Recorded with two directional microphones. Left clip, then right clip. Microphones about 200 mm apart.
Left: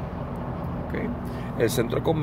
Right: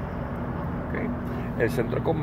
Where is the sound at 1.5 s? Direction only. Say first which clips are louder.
Left 2 dB; 10° left (ahead or behind).